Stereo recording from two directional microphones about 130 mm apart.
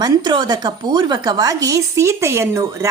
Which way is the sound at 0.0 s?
35° right (ahead or behind).